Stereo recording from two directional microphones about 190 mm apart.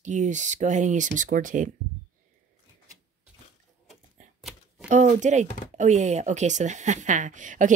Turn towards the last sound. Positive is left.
turn(degrees=-40)  # may be behind; listen again after turning